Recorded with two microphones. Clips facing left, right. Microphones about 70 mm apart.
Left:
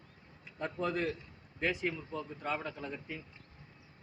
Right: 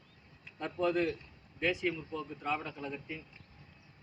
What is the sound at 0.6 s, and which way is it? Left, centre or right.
Speech, left.